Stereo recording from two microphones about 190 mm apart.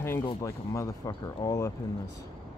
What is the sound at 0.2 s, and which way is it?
Speech, 20° left (ahead or behind).